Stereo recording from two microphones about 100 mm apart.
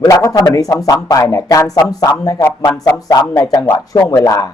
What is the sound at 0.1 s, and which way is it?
A man's voice, 35° left (ahead or behind).